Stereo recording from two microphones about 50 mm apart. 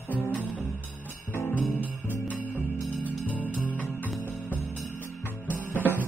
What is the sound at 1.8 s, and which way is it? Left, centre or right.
Jingle bell, left.